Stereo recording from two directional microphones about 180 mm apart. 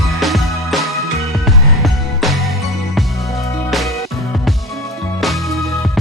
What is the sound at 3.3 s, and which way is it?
Music, 15° left (ahead or behind).